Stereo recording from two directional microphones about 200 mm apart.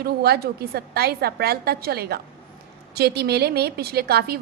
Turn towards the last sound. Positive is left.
turn(degrees=-50)  # may be behind; listen again after turning